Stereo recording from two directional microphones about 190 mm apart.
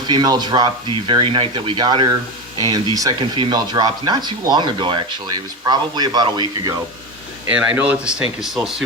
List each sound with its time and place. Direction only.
0.1 s speech: 20° right (ahead or behind)
7.4 s speech: 5° right (ahead or behind)